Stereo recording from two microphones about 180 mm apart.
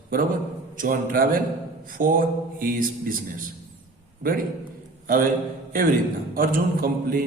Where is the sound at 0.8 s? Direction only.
50° right (ahead or behind).